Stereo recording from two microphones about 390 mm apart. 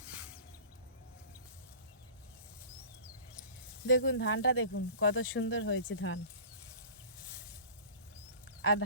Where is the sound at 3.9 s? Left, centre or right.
Left.